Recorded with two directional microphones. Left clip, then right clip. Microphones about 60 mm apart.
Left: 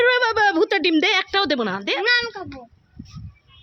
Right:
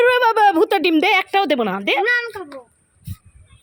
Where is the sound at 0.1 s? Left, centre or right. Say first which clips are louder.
Right 4 dB; right.